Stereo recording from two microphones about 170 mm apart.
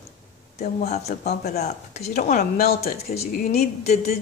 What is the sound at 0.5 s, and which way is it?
Speech, 60° left (ahead or behind).